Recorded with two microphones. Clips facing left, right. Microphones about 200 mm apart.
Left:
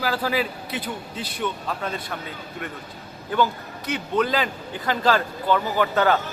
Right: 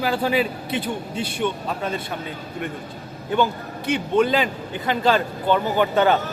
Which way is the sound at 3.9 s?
25° right (ahead or behind).